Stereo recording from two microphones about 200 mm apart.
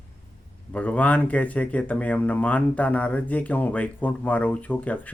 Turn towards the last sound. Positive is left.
turn(degrees=10)  # may be behind; listen again after turning